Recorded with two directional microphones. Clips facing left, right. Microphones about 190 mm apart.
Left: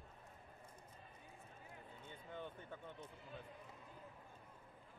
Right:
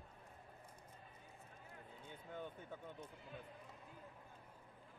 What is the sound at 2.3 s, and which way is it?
Speech, 10° right (ahead or behind).